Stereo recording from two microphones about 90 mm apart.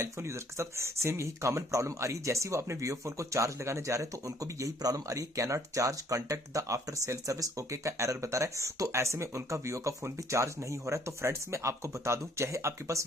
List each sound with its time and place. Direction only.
0.0 s speech: 30° right (ahead or behind)